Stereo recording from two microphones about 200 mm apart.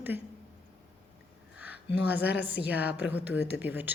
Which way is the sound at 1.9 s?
55° left (ahead or behind).